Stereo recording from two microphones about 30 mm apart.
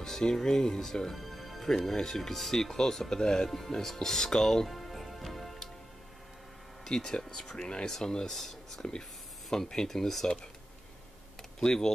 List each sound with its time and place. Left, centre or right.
0.0 s speech: centre
1.1 s music: centre
2.0 s speech: centre
3.4 s speech: centre
4.6 s music: centre
6.9 s speech: left
8.4 s speech: centre
9.8 s speech: centre
11.6 s speech: left